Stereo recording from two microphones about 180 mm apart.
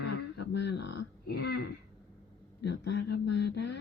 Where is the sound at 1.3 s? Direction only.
65° left (ahead or behind).